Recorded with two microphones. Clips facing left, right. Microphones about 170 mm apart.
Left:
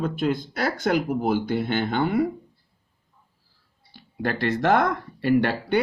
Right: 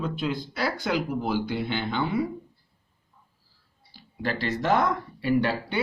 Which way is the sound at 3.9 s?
55° left (ahead or behind).